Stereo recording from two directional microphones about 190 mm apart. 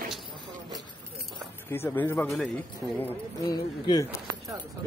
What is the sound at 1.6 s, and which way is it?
A man's voice, 10° left (ahead or behind).